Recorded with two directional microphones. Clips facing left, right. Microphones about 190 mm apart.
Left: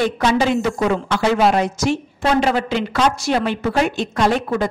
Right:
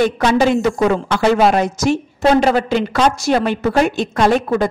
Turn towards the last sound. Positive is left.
turn(degrees=-50)  # may be behind; listen again after turning